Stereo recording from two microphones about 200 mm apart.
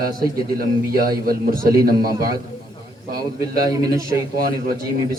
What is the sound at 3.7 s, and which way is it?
Speech, 20° right (ahead or behind).